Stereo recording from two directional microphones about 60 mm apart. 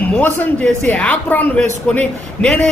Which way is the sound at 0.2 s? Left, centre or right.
Left.